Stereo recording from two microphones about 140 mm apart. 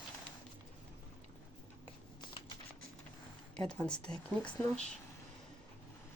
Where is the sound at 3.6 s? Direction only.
5° left (ahead or behind).